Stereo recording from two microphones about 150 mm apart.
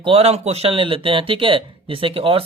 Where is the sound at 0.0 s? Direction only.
40° right (ahead or behind).